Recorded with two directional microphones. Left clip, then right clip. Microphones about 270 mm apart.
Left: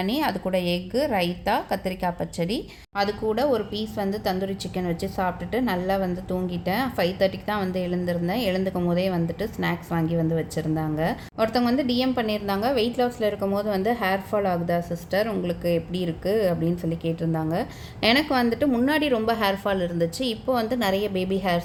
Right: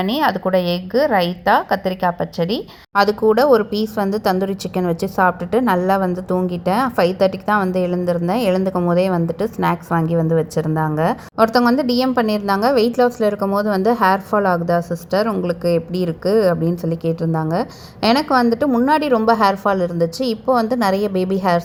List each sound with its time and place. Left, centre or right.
0.0 s a woman's voice: centre
2.9 s a woman's voice: right